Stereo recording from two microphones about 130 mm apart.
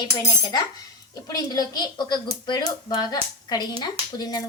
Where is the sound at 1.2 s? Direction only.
30° left (ahead or behind).